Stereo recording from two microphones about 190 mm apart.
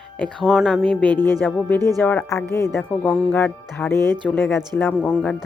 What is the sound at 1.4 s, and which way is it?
Speech, 10° left (ahead or behind).